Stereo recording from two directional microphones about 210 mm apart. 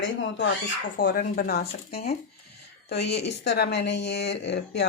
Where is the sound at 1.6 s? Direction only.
30° left (ahead or behind).